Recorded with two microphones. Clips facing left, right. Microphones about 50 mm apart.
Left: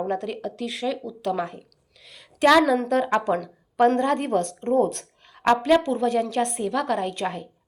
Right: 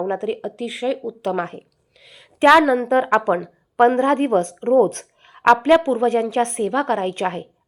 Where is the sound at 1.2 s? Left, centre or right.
Right.